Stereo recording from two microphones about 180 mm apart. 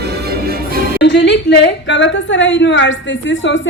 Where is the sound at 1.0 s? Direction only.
75° left (ahead or behind).